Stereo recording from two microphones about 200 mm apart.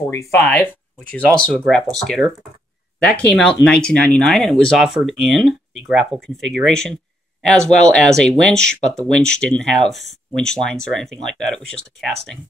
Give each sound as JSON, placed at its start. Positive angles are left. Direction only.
{"t": 0.1, "sound": "speech", "side_deg": 10}